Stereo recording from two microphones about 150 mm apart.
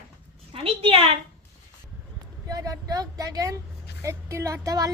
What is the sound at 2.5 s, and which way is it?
Speech, 25° right (ahead or behind).